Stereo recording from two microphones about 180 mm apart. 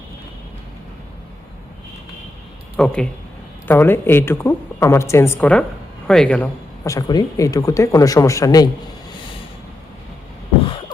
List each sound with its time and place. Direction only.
2.7 s a woman's voice: 5° left (ahead or behind)
6.8 s speech: 20° left (ahead or behind)